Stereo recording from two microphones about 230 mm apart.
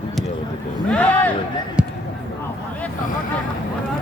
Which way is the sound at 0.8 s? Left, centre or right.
Centre.